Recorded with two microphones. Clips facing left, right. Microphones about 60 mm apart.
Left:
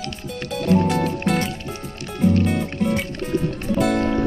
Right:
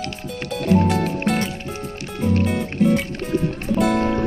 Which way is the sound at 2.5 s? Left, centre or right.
Centre.